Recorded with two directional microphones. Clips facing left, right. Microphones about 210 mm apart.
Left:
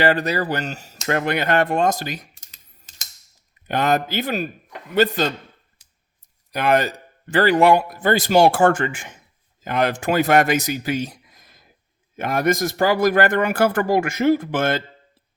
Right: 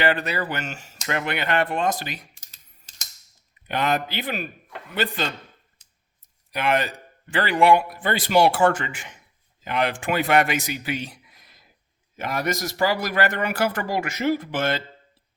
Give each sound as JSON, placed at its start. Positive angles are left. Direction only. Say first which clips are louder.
{"t": 0.0, "sound": "speech", "louder": "left 4 dB", "side_deg": 40}
{"t": 3.7, "sound": "speech", "louder": "left 4 dB", "side_deg": 45}
{"t": 6.5, "sound": "speech", "louder": "left 4 dB", "side_deg": 40}